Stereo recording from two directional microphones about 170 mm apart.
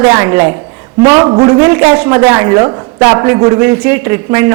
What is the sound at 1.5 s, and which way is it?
A woman's voice, 15° right (ahead or behind).